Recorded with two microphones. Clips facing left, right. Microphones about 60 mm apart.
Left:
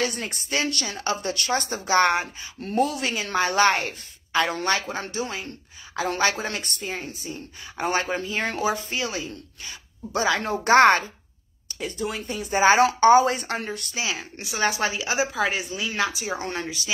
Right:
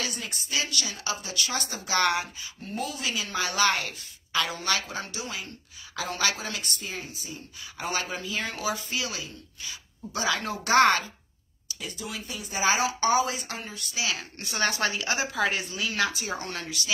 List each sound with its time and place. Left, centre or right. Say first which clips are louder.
0.0 s a woman's voice: left 7 dB; left
1.9 s speech: left 5 dB; left
2.6 s a woman's voice: left 9 dB; left
11.8 s a woman's voice: left 8 dB; left
13.9 s a woman's voice: left 1 dB; left
14.4 s speech: left 3 dB; centre
15.6 s speech: left 2 dB; centre
16.3 s a woman's voice: left 4 dB; left